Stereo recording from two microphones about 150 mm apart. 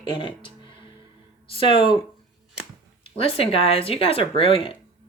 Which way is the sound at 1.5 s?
35° left (ahead or behind).